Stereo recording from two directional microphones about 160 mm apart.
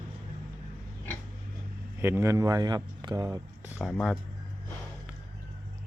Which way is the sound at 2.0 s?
15° right (ahead or behind).